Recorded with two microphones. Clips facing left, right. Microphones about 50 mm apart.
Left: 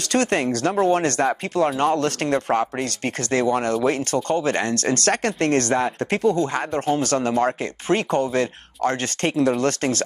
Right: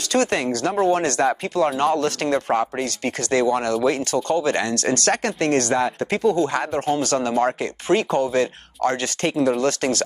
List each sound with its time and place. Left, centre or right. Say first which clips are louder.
0.1 s speech: even; left